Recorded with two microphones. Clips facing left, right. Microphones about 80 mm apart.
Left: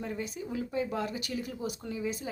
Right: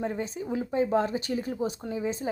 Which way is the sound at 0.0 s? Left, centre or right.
Right.